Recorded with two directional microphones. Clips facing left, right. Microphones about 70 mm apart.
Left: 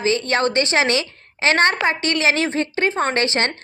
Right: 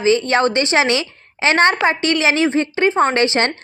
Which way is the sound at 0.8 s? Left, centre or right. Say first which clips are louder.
Right 2 dB; left.